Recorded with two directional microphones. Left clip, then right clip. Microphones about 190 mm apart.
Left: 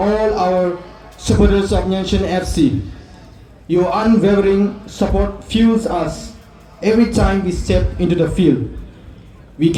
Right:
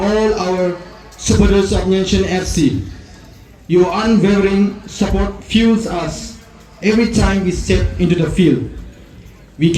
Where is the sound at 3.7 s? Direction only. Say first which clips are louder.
Right 1 dB; 35° left (ahead or behind).